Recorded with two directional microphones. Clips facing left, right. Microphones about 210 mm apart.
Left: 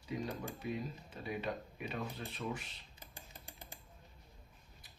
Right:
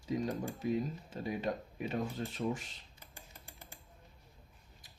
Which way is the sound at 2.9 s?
15° left (ahead or behind).